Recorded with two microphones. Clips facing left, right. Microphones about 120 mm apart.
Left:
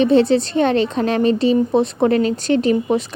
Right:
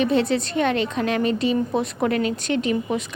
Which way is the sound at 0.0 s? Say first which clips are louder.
Left 7 dB; 30° left (ahead or behind).